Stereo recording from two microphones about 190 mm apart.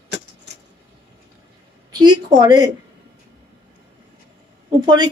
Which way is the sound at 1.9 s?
20° right (ahead or behind).